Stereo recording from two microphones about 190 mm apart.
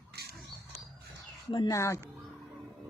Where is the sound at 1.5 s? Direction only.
20° left (ahead or behind).